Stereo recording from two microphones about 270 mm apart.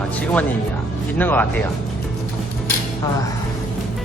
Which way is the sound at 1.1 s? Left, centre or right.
Centre.